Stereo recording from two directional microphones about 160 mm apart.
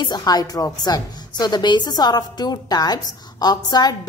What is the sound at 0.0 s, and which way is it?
A woman's voice, 25° left (ahead or behind).